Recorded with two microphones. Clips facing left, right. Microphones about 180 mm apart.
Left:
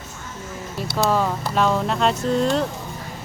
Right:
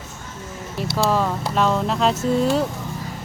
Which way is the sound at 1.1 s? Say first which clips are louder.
Even; centre (ahead or behind).